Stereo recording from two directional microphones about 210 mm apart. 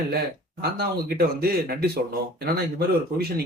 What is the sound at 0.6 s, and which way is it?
Speech, 50° right (ahead or behind).